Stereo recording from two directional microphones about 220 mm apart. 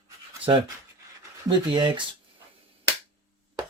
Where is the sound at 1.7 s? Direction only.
20° right (ahead or behind).